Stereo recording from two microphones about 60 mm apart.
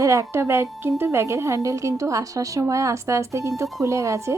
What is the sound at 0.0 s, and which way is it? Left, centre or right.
A woman's voice, right.